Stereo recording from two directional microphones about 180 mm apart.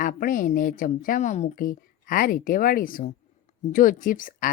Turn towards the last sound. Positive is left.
turn(degrees=50)  # may be behind; listen again after turning